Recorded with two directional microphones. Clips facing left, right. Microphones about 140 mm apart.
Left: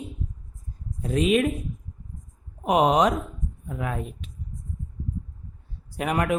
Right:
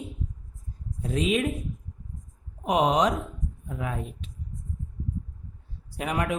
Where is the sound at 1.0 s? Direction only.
55° left (ahead or behind).